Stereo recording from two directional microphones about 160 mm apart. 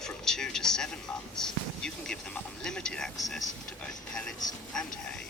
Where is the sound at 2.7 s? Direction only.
5° left (ahead or behind).